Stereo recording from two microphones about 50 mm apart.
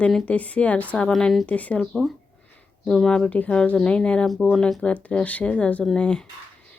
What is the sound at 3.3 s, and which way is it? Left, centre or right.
Speech, left.